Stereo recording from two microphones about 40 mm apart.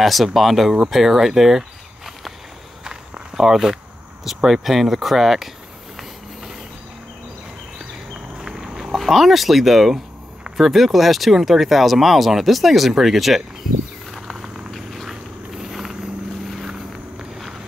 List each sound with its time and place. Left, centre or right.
0.0 s speech: centre
2.8 s walk: centre
4.2 s speech: centre
8.1 s a sound: centre
10.6 s speech: centre
14.3 s a sound: centre
15.0 s walk: centre